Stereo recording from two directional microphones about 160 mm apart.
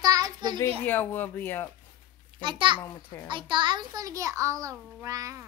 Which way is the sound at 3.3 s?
30° right (ahead or behind).